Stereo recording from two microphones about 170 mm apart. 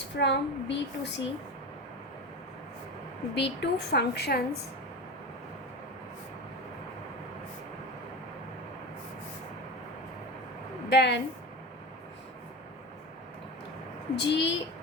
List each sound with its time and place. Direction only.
0.2 s speech: 90° left
3.3 s a woman's voice: 85° left
10.8 s a woman's voice: 90° left
14.2 s speech: 90° left